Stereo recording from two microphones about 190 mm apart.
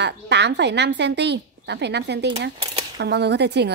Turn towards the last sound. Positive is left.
turn(degrees=-65)  # may be behind; listen again after turning